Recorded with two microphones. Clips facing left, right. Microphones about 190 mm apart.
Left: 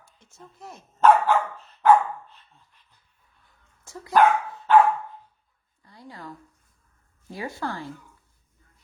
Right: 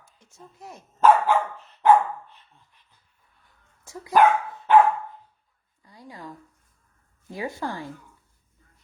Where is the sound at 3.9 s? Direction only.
15° right (ahead or behind).